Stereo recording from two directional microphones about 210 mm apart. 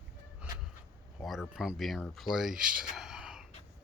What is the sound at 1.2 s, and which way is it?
Speech, centre (ahead or behind).